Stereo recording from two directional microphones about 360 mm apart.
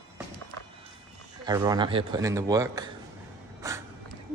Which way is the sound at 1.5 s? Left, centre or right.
Centre.